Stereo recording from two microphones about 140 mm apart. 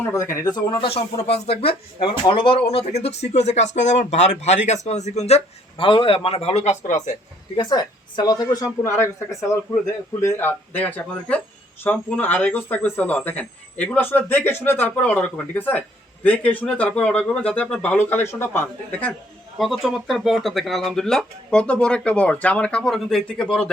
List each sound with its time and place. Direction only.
0.1 s speech: 20° left (ahead or behind)
0.5 s speech: 35° left (ahead or behind); by 7.2 s 60° left (ahead or behind)
7.5 s speech: 30° left (ahead or behind); by 19.1 s 10° left (ahead or behind)
19.5 s speech: centre (ahead or behind)